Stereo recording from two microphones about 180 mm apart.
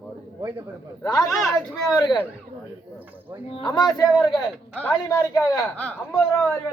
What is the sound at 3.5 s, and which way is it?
Speech, 25° left (ahead or behind).